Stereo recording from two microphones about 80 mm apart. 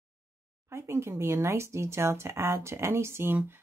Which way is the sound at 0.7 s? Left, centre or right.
Right.